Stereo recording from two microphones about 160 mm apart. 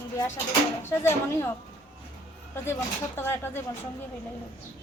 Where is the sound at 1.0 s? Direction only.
15° left (ahead or behind).